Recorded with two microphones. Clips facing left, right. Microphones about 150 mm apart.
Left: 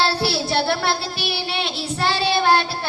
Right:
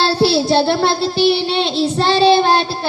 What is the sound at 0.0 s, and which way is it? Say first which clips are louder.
Child singing: right 7 dB; 25° right (ahead or behind).